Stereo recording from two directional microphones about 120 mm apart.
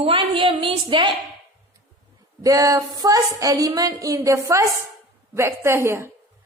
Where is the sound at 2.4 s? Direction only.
30° right (ahead or behind).